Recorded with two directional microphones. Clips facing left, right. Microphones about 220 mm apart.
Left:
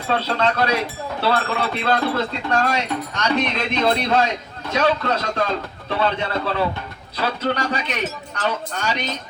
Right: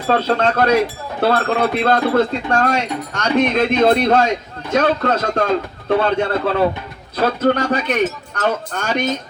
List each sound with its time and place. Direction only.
0.1 s speech: 50° right (ahead or behind)